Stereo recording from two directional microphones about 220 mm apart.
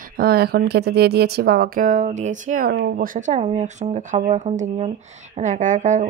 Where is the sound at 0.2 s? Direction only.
45° right (ahead or behind).